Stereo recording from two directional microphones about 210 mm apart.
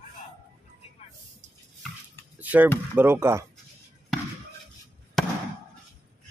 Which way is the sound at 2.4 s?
10° right (ahead or behind).